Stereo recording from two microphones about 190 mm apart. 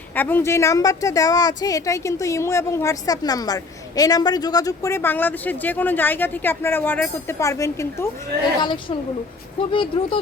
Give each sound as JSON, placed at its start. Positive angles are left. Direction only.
{"t": 0.1, "sound": "a woman's voice", "side_deg": 10}